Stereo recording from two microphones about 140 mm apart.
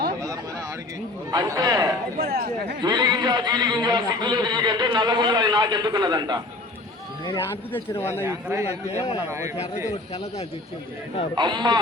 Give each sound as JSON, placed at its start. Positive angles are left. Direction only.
{"t": 1.3, "sound": "a man's voice", "side_deg": -25}
{"t": 2.1, "sound": "speech", "side_deg": -90}
{"t": 2.8, "sound": "a man's voice", "side_deg": -30}
{"t": 7.7, "sound": "speech", "side_deg": 15}
{"t": 8.2, "sound": "speech", "side_deg": -15}
{"t": 11.3, "sound": "a man's voice", "side_deg": -30}